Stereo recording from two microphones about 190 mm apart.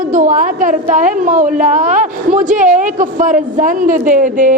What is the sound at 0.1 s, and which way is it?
A woman's voice, 45° right (ahead or behind).